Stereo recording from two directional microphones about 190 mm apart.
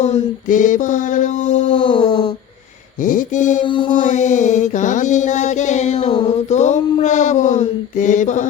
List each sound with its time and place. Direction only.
0.0 s mantra: 40° left (ahead or behind); by 2.3 s 20° left (ahead or behind)
3.0 s mantra: 45° left (ahead or behind)
3.6 s mantra: 25° left (ahead or behind)
3.9 s mantra: 40° left (ahead or behind)